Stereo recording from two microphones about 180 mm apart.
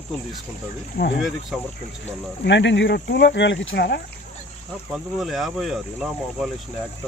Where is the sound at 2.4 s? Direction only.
80° left; by 4.0 s 65° left (ahead or behind).